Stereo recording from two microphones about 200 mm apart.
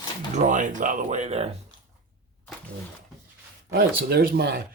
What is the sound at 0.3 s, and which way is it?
Speech, 40° right (ahead or behind).